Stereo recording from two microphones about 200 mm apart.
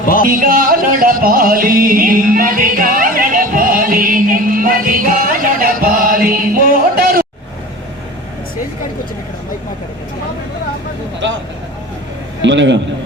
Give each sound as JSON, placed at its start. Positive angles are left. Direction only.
{"t": 0.0, "sound": "a man's voice", "side_deg": 45}
{"t": 0.3, "sound": "music", "side_deg": -45}
{"t": 12.4, "sound": "a man's voice", "side_deg": -65}